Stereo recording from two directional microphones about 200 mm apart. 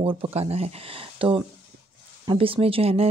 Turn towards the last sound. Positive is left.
turn(degrees=-30)  # may be behind; listen again after turning